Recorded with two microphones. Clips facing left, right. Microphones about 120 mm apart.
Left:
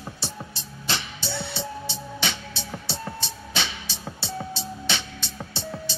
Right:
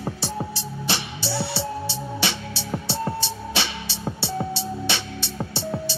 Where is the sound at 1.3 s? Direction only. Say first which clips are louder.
Right 6 dB; 70° right (ahead or behind).